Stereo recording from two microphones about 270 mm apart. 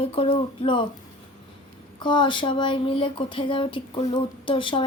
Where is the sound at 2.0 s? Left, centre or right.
Centre.